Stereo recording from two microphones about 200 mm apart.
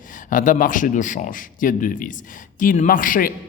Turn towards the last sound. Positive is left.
turn(degrees=45)  # may be behind; listen again after turning